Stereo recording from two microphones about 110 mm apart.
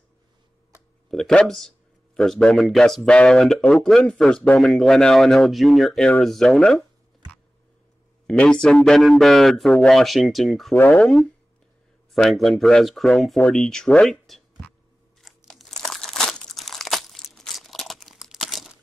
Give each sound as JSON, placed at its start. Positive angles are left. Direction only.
{"t": 1.1, "sound": "speech", "side_deg": 5}
{"t": 8.3, "sound": "speech", "side_deg": 10}
{"t": 10.7, "sound": "speech", "side_deg": 20}
{"t": 12.1, "sound": "speech", "side_deg": 0}
{"t": 15.2, "sound": "crumpling", "side_deg": 0}